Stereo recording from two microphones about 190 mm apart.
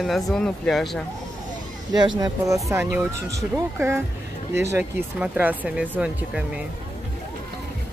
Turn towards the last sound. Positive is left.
turn(degrees=-5)  # may be behind; listen again after turning